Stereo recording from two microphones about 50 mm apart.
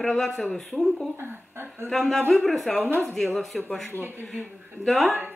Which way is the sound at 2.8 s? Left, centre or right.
Right.